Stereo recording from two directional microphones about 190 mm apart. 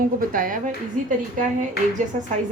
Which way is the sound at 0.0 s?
45° right (ahead or behind).